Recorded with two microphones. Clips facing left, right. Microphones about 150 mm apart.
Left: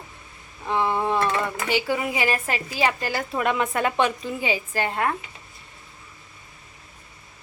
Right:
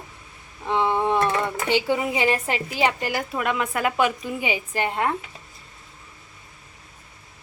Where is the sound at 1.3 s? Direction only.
20° right (ahead or behind).